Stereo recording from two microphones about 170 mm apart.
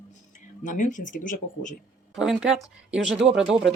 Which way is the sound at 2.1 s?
Centre (ahead or behind).